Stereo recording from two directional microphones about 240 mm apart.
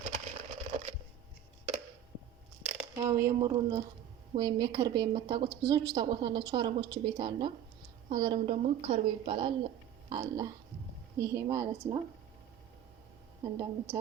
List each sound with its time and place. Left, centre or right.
0.0 s a sound: right
2.9 s a woman's voice: centre
13.4 s speech: centre